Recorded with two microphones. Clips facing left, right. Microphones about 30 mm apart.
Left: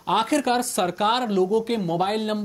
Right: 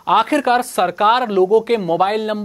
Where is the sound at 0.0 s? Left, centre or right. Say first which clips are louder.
Right 7 dB; centre.